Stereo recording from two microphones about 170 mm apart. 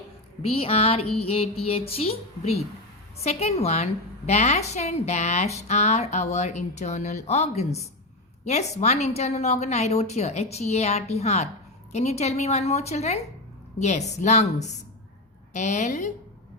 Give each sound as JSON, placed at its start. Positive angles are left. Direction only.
{"t": 0.4, "sound": "a woman's voice", "side_deg": 35}